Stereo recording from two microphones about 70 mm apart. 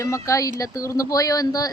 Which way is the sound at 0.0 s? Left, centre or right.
Left.